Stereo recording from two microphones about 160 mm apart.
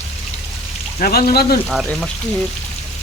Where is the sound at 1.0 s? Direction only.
75° left (ahead or behind).